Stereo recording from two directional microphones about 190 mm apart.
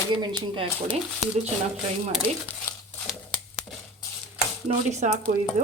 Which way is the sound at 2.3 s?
35° right (ahead or behind).